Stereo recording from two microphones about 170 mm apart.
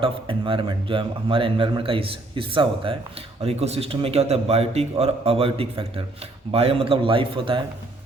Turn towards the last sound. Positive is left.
turn(degrees=-30)  # may be behind; listen again after turning